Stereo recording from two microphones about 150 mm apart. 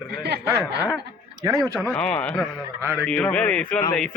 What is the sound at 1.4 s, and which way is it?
Speech, 20° right (ahead or behind).